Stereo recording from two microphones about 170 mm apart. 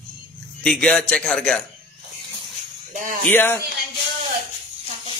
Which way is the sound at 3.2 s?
10° left (ahead or behind).